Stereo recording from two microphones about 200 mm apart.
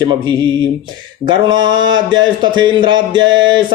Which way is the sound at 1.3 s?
25° right (ahead or behind).